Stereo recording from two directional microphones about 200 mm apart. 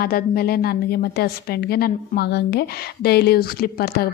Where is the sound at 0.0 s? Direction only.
50° left (ahead or behind).